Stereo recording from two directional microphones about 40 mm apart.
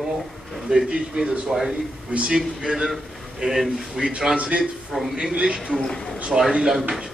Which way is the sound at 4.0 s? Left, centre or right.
Centre.